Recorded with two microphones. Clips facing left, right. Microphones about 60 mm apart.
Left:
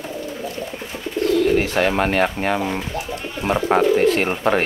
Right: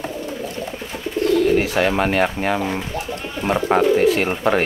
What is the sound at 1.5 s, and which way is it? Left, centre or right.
Speech, centre.